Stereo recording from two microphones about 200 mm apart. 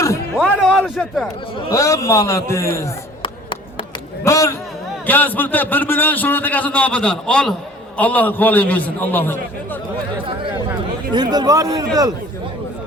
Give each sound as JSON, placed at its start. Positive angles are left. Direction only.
{"t": 0.3, "sound": "a man's voice", "side_deg": 0}
{"t": 1.7, "sound": "a man's voice", "side_deg": 15}
{"t": 4.2, "sound": "a man's voice", "side_deg": 15}
{"t": 11.1, "sound": "a man's voice", "side_deg": -20}